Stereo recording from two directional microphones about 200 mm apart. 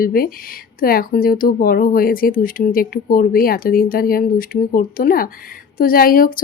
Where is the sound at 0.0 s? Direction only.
45° left (ahead or behind).